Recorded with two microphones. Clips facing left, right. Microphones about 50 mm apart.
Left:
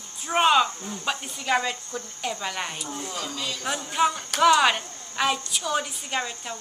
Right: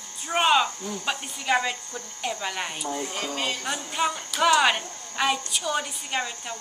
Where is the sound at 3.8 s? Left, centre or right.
Centre.